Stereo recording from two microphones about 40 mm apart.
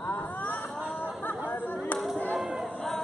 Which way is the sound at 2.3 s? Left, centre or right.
Centre.